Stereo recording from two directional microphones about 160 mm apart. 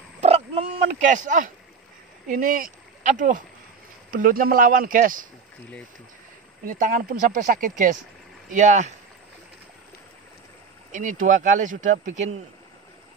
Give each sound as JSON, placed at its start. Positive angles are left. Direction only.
{"t": 0.2, "sound": "dog", "side_deg": -45}
{"t": 2.2, "sound": "speech", "side_deg": -55}
{"t": 6.6, "sound": "speech", "side_deg": -55}
{"t": 10.9, "sound": "speech", "side_deg": -55}